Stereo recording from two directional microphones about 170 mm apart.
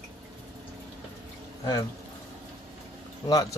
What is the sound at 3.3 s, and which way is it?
Speech, 20° left (ahead or behind).